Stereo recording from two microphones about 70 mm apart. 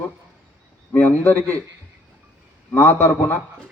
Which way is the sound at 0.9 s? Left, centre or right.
Left.